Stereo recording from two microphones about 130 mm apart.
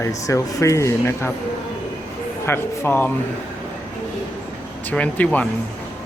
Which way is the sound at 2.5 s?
15° left (ahead or behind).